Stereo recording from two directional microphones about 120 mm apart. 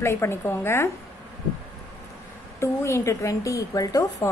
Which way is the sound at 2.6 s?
25° left (ahead or behind).